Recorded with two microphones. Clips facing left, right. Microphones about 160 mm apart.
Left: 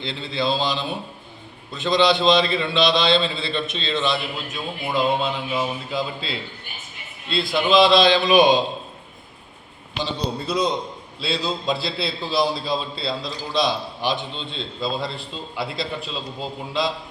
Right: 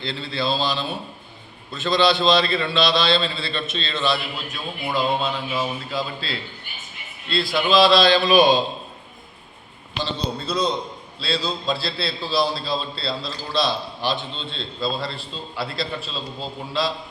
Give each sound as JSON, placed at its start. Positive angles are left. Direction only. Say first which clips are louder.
{"t": 0.0, "sound": "a man's voice", "louder": "left 1 dB", "side_deg": 20}
{"t": 10.0, "sound": "a man's voice", "louder": "left 1 dB", "side_deg": 15}